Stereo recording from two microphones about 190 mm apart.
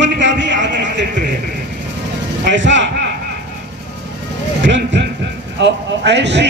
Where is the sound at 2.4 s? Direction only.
70° right (ahead or behind).